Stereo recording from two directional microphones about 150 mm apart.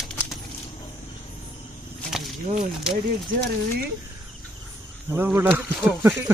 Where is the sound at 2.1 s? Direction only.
Centre (ahead or behind).